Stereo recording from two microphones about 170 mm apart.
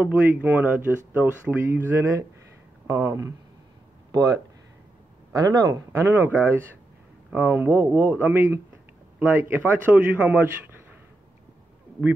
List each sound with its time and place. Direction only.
0.0 s speech: 10° right (ahead or behind)